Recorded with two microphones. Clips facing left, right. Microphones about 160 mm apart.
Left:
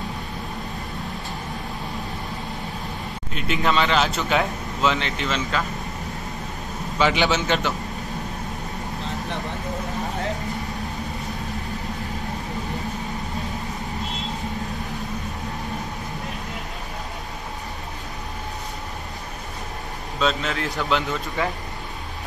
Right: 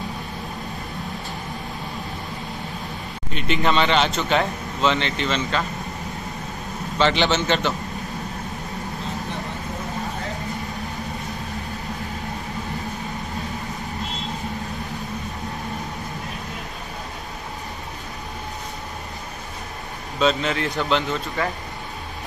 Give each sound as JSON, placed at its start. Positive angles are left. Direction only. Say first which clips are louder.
{"t": 3.3, "sound": "speech", "louder": "right 1 dB", "side_deg": 0}
{"t": 7.0, "sound": "a man's voice", "louder": "right 1 dB", "side_deg": 5}
{"t": 20.2, "sound": "speech", "louder": "right 3 dB", "side_deg": 0}